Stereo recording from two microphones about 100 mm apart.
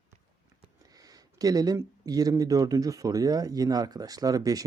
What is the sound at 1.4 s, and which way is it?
Speech, 40° right (ahead or behind).